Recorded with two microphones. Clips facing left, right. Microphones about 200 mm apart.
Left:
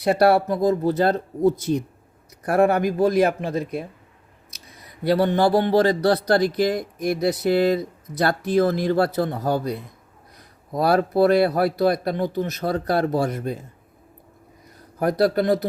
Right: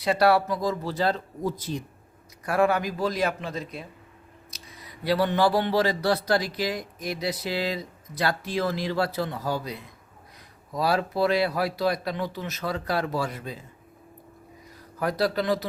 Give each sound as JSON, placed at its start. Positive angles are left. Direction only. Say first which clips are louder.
{"t": 0.0, "sound": "speech", "louder": "left 4 dB", "side_deg": 55}
{"t": 2.4, "sound": "speech", "louder": "left 5 dB", "side_deg": 55}
{"t": 5.0, "sound": "speech", "louder": "left 4 dB", "side_deg": 50}
{"t": 14.9, "sound": "speech", "louder": "left 6 dB", "side_deg": 50}